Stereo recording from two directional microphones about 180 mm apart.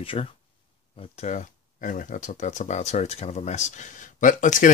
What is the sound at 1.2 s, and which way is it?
Speech, 45° left (ahead or behind).